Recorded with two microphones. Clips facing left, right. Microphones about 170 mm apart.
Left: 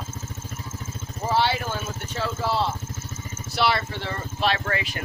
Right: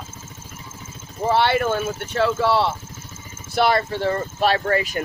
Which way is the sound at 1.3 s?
60° right (ahead or behind).